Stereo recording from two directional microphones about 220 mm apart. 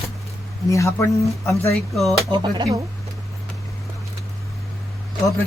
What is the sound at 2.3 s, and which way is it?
Speech, 20° right (ahead or behind).